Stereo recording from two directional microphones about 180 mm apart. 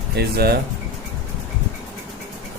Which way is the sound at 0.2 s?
60° right (ahead or behind).